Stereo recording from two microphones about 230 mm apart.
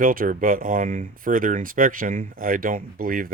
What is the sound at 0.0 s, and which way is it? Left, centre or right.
Speech, right.